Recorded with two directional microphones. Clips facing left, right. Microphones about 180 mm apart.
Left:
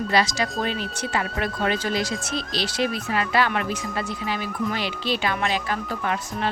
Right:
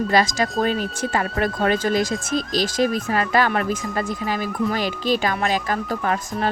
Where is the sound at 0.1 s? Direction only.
45° right (ahead or behind).